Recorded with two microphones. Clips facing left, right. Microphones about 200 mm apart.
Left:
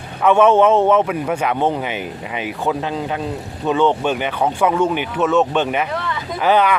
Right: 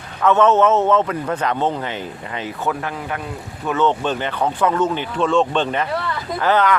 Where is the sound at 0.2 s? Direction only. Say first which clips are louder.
Left 2 dB; 10° left (ahead or behind).